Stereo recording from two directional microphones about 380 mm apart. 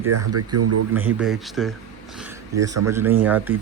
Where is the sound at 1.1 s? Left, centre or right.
Centre.